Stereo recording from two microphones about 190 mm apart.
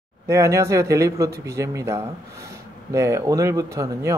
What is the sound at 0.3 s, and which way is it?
Speech, 15° right (ahead or behind).